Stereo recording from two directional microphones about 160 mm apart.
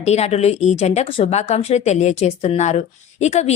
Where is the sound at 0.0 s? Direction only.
40° left (ahead or behind).